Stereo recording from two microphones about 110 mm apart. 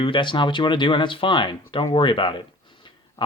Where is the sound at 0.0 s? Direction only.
50° left (ahead or behind).